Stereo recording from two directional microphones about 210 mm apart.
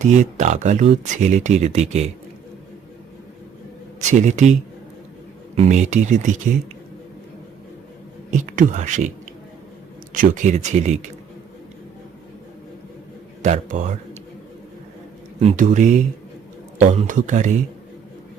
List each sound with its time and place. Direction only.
0.0 s speech: 35° right (ahead or behind)
4.0 s speech: 35° right (ahead or behind)
5.5 s speech: 35° right (ahead or behind)
8.3 s speech: 35° right (ahead or behind)
10.2 s speech: 35° right (ahead or behind)
13.4 s speech: 35° right (ahead or behind)
15.4 s speech: 35° right (ahead or behind)